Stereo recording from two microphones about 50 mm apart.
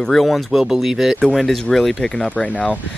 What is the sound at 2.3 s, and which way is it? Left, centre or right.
Speech, left.